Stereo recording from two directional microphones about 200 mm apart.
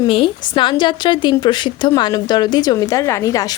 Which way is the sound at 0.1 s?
25° left (ahead or behind).